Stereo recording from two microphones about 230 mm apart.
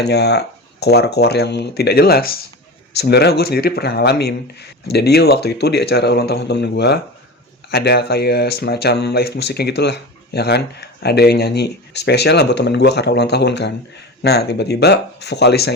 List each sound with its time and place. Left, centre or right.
0.0 s speech: left